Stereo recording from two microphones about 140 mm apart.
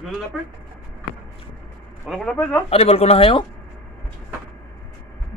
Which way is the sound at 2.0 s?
Centre (ahead or behind).